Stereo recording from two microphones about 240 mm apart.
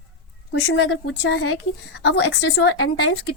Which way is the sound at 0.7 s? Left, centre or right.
Left.